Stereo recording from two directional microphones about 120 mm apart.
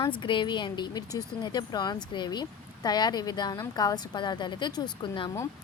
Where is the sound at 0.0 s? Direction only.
40° left (ahead or behind).